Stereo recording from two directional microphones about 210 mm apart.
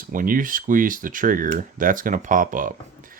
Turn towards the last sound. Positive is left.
turn(degrees=-40)  # may be behind; listen again after turning